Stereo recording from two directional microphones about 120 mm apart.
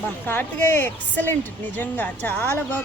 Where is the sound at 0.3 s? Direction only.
15° left (ahead or behind).